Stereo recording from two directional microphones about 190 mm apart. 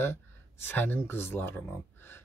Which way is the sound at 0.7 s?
10° left (ahead or behind).